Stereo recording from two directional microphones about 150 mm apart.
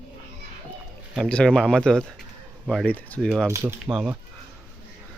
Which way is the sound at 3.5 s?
15° right (ahead or behind).